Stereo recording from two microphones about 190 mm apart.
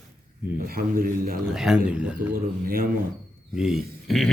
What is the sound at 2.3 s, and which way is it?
Speech, 50° right (ahead or behind).